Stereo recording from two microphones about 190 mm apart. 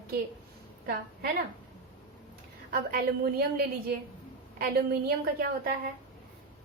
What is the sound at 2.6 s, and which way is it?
Speech, 50° right (ahead or behind).